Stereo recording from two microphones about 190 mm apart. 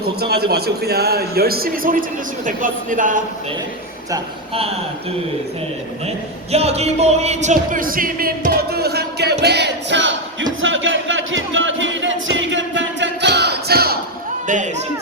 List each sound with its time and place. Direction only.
0.2 s a man's voice: 55° right (ahead or behind)
6.5 s speech: 35° right (ahead or behind); by 10.2 s 70° right (ahead or behind)
10.6 s music: 90° right; by 14.0 s 55° right (ahead or behind)
14.4 s a sound: 40° right (ahead or behind)